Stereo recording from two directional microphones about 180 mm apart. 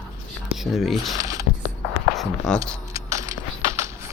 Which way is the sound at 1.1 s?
20° right (ahead or behind).